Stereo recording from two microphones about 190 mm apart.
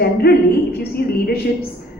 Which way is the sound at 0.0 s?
55° left (ahead or behind).